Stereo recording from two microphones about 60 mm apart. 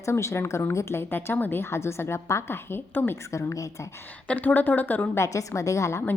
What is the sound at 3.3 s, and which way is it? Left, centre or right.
Speech, left.